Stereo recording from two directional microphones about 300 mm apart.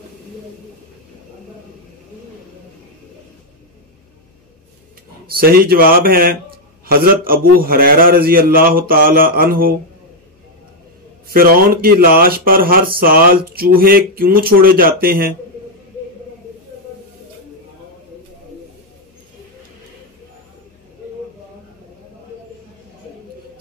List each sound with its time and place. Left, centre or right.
5.3 s speech: right
11.2 s speech: right